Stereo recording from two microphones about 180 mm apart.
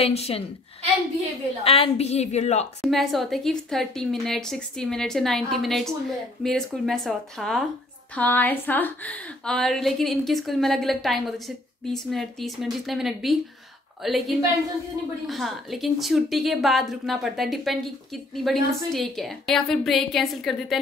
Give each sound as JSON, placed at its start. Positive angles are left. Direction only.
{"t": 0.0, "sound": "a woman's voice", "side_deg": 35}
{"t": 1.6, "sound": "a woman's voice", "side_deg": 35}
{"t": 2.8, "sound": "a woman's voice", "side_deg": 0}